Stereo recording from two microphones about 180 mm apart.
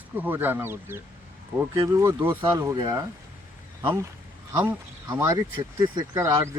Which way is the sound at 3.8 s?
10° right (ahead or behind).